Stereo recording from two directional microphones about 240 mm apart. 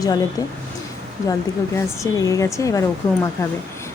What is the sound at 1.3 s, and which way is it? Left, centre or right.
A woman's voice, centre.